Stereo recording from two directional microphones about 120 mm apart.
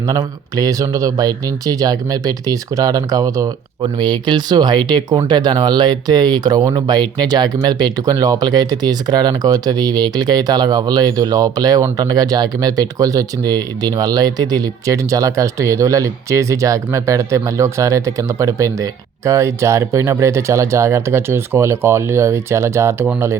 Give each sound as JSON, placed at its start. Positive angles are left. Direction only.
{"t": 0.1, "sound": "speech", "side_deg": -30}